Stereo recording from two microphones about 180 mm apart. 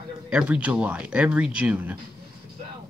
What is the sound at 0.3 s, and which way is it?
Speech, 5° right (ahead or behind).